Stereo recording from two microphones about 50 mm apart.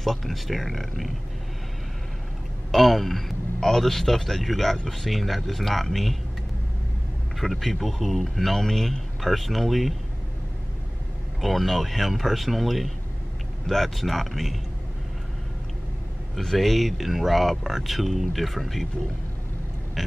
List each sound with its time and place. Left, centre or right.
0.0 s speech: centre
2.7 s a man's voice: centre
7.3 s speech: centre
11.4 s speech: centre
16.3 s speech: centre